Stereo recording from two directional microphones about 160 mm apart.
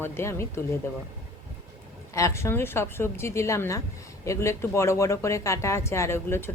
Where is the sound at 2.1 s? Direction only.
20° left (ahead or behind).